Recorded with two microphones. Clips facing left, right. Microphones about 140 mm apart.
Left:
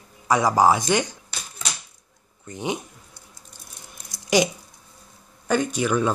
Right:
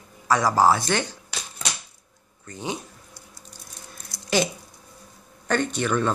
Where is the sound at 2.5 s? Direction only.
20° left (ahead or behind).